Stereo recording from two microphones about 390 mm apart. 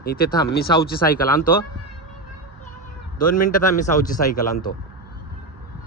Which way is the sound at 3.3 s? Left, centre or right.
Centre.